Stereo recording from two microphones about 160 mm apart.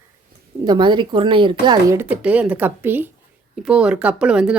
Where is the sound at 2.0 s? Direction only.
10° right (ahead or behind).